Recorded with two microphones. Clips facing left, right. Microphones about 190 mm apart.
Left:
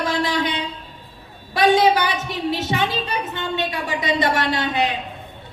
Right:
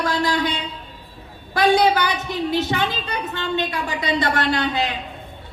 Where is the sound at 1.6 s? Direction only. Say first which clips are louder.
Left 1 dB; 20° left (ahead or behind).